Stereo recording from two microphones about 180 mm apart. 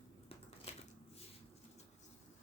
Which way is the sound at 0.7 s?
35° left (ahead or behind).